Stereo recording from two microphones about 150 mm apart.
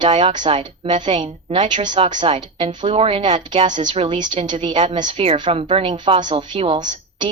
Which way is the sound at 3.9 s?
40° right (ahead or behind).